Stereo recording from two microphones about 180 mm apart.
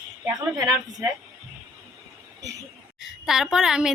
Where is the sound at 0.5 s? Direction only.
20° right (ahead or behind).